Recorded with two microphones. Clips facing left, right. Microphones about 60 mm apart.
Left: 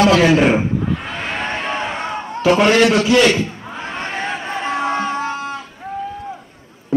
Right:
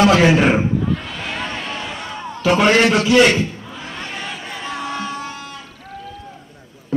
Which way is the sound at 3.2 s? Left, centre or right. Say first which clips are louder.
Right 3 dB; right.